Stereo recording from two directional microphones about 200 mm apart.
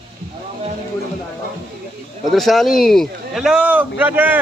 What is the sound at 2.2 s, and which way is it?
Speech, centre (ahead or behind).